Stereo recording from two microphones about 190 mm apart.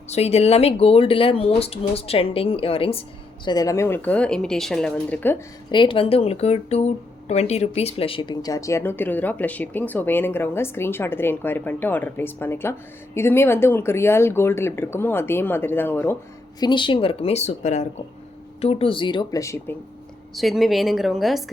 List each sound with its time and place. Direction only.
0.1 s speech: 35° left (ahead or behind); by 5.4 s 10° left (ahead or behind)
5.7 s speech: 25° left (ahead or behind); by 16.1 s 10° left (ahead or behind)
16.6 s speech: 25° left (ahead or behind)
20.3 s a woman's voice: centre (ahead or behind)